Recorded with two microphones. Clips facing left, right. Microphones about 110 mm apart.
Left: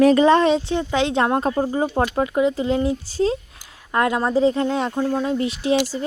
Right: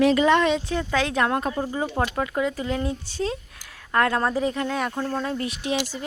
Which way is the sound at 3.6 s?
20° left (ahead or behind).